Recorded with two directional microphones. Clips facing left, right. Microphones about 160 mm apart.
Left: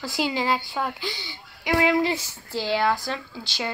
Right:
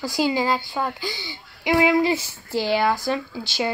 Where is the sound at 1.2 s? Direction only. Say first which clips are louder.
Right 5 dB; 10° right (ahead or behind).